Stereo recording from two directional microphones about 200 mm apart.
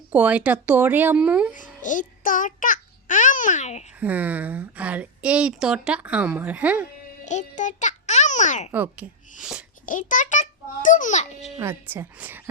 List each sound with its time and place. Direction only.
0.1 s a woman's voice: 5° right (ahead or behind)
1.8 s a child's voice: 40° left (ahead or behind)
4.0 s a woman's voice: 10° right (ahead or behind)
7.3 s music: 35° left (ahead or behind)
8.7 s a woman's voice: 10° right (ahead or behind)
9.8 s a child's voice: 40° left (ahead or behind)
11.6 s a woman's voice: 10° right (ahead or behind)